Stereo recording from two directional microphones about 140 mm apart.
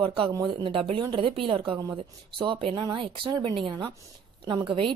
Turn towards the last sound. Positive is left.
turn(degrees=-35)  # may be behind; listen again after turning